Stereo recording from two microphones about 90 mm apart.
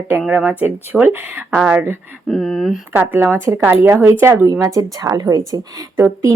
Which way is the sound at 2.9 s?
20° right (ahead or behind).